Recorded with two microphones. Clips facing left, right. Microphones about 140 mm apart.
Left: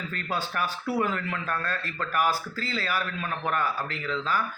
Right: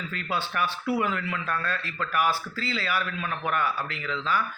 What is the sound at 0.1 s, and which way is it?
A man's voice, 40° left (ahead or behind).